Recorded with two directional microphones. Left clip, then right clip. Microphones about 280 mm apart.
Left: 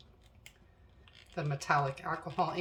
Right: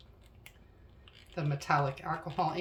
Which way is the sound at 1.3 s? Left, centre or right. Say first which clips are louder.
Even; centre.